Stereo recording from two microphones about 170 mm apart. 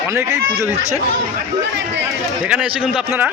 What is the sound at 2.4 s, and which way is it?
Speech, 5° right (ahead or behind).